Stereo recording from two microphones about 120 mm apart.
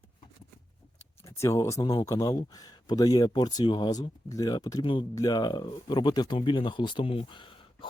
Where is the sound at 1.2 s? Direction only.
25° left (ahead or behind); by 5.0 s 40° left (ahead or behind).